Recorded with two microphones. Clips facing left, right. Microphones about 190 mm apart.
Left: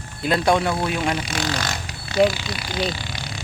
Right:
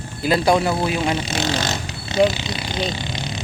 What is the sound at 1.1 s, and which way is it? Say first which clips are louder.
Vehicle: right 3 dB; 25° right (ahead or behind).